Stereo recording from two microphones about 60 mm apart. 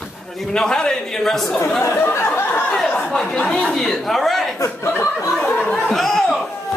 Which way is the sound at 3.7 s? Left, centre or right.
Centre.